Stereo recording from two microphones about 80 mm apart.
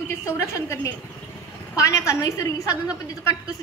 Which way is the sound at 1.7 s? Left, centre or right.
Left.